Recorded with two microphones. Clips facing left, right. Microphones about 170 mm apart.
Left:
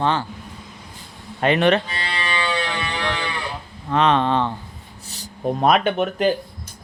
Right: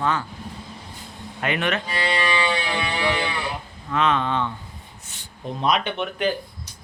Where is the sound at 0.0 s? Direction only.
30° left (ahead or behind).